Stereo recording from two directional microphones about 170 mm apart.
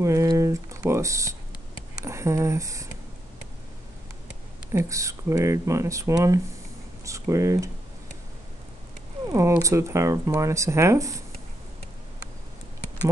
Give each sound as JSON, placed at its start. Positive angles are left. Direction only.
{"t": 0.0, "sound": "speech", "side_deg": -20}
{"t": 4.7, "sound": "speech", "side_deg": -20}
{"t": 9.3, "sound": "speech", "side_deg": -20}